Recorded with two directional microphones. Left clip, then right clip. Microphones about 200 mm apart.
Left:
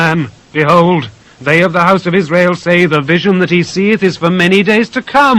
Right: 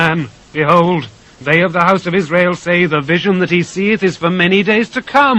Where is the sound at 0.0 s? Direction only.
25° right (ahead or behind).